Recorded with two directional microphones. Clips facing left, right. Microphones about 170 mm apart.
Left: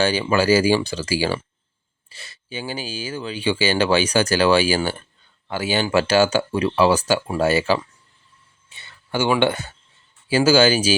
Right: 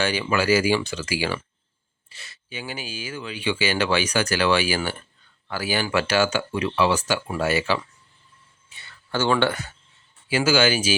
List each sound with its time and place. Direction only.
0.0 s speech: 30° left (ahead or behind)
9.1 s speech: 15° left (ahead or behind)
10.2 s speech: 35° left (ahead or behind)